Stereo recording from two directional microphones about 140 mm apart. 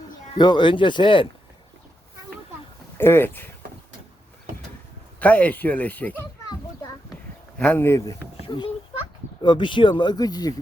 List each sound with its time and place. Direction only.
0.3 s speech: 30° left (ahead or behind)
3.0 s speech: 15° left (ahead or behind)
5.2 s speech: 10° left (ahead or behind)
7.6 s a man's voice: 15° left (ahead or behind)